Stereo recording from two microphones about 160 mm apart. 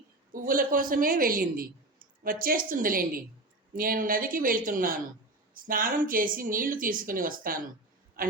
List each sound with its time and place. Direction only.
0.3 s a man's voice: 60° right (ahead or behind)